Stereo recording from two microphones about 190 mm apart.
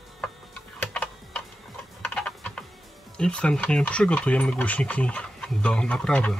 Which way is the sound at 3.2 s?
5° left (ahead or behind).